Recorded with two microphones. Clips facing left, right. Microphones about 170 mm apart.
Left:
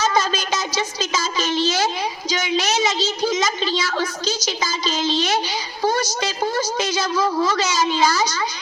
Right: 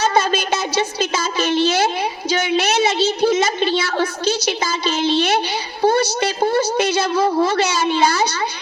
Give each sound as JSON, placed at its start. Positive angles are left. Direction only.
{"t": 0.0, "sound": "a woman's voice", "side_deg": -55}